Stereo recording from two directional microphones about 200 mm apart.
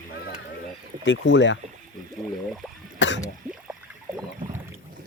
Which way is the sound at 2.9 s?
65° left (ahead or behind).